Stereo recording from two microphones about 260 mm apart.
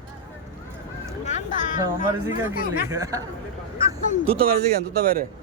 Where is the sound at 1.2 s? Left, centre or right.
Left.